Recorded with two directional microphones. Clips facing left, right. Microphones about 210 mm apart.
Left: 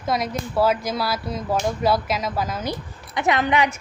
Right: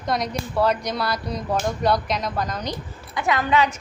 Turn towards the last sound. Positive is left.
turn(degrees=15)  # may be behind; listen again after turning